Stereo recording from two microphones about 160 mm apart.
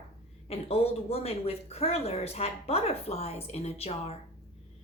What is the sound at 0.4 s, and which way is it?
Speech, 40° left (ahead or behind).